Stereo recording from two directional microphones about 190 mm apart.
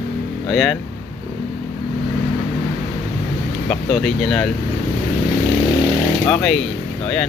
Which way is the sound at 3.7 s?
5° left (ahead or behind).